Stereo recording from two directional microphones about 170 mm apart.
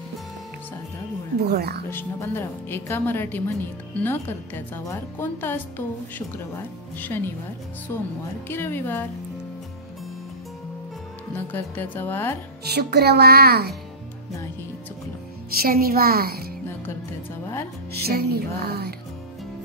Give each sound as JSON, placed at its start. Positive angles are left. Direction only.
{"t": 1.5, "sound": "a woman's voice", "side_deg": -65}
{"t": 1.9, "sound": "a woman's voice", "side_deg": 15}
{"t": 11.3, "sound": "a woman's voice", "side_deg": 10}
{"t": 12.6, "sound": "speech", "side_deg": -70}
{"t": 15.6, "sound": "a woman's voice", "side_deg": -60}
{"t": 18.0, "sound": "speech", "side_deg": -65}